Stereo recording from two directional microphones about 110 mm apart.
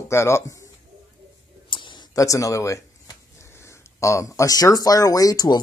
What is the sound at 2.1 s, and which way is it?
Speech, 30° left (ahead or behind).